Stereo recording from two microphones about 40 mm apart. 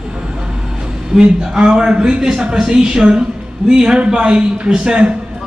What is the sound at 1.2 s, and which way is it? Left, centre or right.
A woman's voice, right.